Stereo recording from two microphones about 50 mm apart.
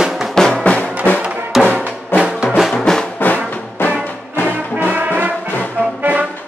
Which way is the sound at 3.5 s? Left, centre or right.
Left.